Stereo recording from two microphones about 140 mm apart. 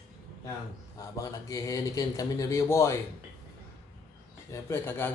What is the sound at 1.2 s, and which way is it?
A man's voice, 25° left (ahead or behind).